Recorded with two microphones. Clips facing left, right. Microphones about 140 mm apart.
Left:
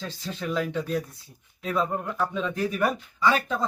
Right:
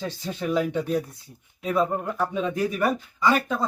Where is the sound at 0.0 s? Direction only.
20° right (ahead or behind).